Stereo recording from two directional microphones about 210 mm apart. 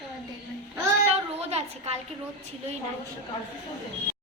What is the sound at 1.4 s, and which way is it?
Speech, 30° right (ahead or behind).